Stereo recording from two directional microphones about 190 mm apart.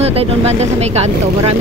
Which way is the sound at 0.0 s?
35° right (ahead or behind).